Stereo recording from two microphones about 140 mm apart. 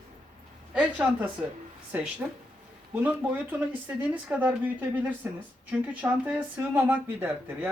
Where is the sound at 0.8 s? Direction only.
10° right (ahead or behind).